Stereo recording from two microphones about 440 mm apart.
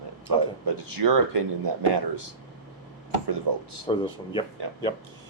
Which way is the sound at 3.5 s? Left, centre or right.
Right.